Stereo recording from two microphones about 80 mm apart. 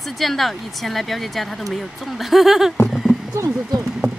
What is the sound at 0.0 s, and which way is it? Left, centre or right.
Speech, centre.